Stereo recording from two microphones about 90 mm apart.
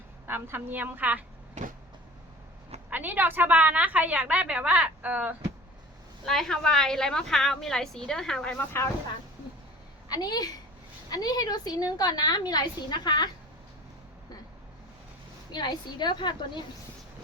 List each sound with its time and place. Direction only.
0.3 s a woman's voice: 25° right (ahead or behind)
2.9 s a woman's voice: 20° right (ahead or behind)
6.2 s a woman's voice: 5° left (ahead or behind)
10.1 s a woman's voice: 45° left (ahead or behind)
15.5 s a woman's voice: 55° left (ahead or behind)